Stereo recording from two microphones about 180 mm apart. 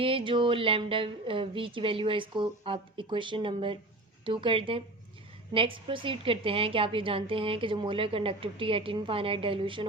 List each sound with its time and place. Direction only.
0.0 s a woman's voice: 30° right (ahead or behind)